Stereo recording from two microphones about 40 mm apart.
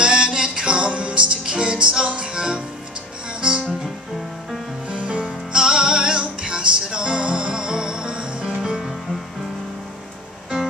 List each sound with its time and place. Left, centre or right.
0.0 s music: right
4.8 s music: right